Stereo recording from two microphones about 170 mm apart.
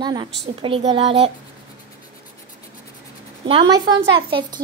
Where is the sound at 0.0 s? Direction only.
25° right (ahead or behind).